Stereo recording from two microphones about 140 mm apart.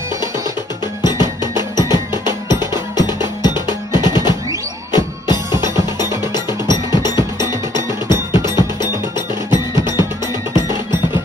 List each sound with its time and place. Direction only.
1.0 s music: 30° left (ahead or behind)